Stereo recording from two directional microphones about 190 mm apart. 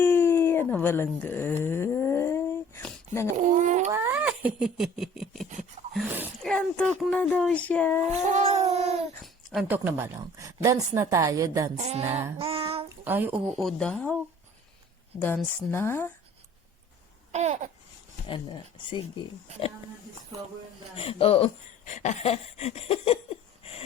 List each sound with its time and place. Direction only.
0.0 s a sound: 10° left (ahead or behind)
3.3 s a child's voice: 40° right (ahead or behind)
3.9 s speech: 10° right (ahead or behind); by 8.0 s 10° left (ahead or behind)
8.0 s dog: 35° right (ahead or behind)
9.2 s a sound: centre (ahead or behind)
9.6 s a woman's voice: 10° right (ahead or behind)
11.8 s babbling: 35° right (ahead or behind)
12.4 s child singing: 30° right (ahead or behind)
13.1 s a woman's voice: 10° right (ahead or behind)
13.6 s speech: 5° left (ahead or behind)
15.7 s speech: 10° left (ahead or behind)
17.3 s babbling: 35° right (ahead or behind)
18.3 s speech: 25° left (ahead or behind)
20.9 s speech: 30° left (ahead or behind)